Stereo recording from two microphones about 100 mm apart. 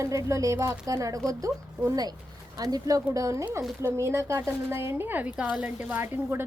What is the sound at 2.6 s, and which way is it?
A woman's voice, 40° right (ahead or behind).